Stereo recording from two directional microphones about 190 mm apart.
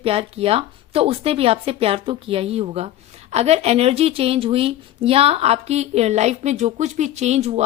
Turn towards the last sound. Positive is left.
turn(degrees=-35)  # may be behind; listen again after turning